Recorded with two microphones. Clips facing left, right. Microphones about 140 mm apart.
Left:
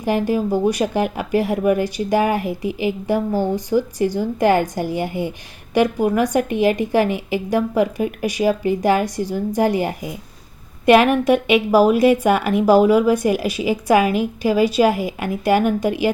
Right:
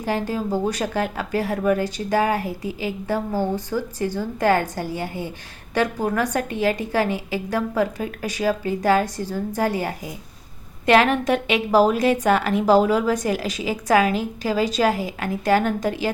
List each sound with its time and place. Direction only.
0.0 s speech: 15° left (ahead or behind)